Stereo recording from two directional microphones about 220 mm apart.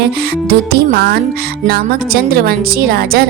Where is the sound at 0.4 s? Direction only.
45° right (ahead or behind).